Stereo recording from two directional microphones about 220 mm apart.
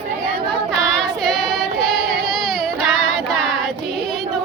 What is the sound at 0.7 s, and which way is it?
Child singing, 5° left (ahead or behind).